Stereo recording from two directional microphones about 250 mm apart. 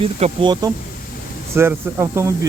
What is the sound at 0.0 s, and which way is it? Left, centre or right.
Speech, right.